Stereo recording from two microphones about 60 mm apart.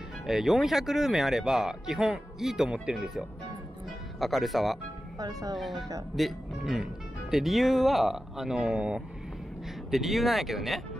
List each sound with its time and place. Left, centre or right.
0.3 s speech: centre
5.2 s speech: right
5.6 s speech: centre
8.7 s speech: centre
9.8 s speech: centre